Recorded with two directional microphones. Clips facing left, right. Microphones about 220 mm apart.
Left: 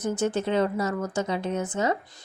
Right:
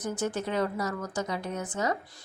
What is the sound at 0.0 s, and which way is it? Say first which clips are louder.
Speech: left 5 dB; 25° left (ahead or behind).